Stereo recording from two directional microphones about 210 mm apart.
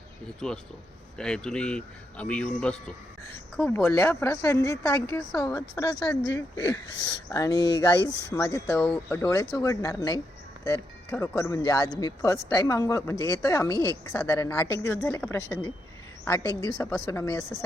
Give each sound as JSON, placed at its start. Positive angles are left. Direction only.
{"t": 0.3, "sound": "a man's voice", "side_deg": 5}